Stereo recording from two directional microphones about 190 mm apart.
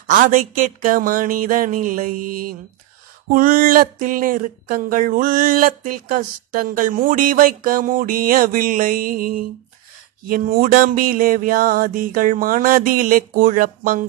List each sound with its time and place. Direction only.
0.0 s speech: 45° right (ahead or behind)